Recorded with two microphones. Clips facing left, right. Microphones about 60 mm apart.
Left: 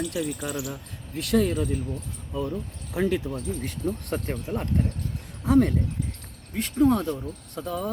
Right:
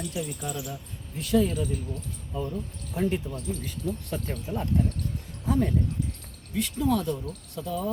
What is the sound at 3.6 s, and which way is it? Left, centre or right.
Speech, left.